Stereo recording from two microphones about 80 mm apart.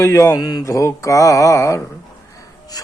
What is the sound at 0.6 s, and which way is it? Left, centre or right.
Speech, left.